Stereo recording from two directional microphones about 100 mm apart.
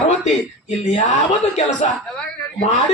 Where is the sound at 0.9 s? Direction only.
90° left.